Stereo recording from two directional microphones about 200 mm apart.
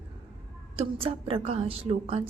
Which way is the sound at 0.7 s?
30° right (ahead or behind).